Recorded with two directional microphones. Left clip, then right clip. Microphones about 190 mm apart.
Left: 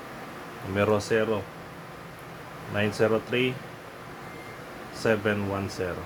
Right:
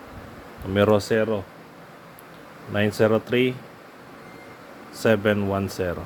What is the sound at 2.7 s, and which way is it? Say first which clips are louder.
Speech: right 4 dB; 45° right (ahead or behind).